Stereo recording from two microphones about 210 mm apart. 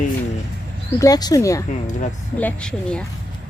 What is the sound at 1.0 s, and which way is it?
A woman's voice, 20° left (ahead or behind).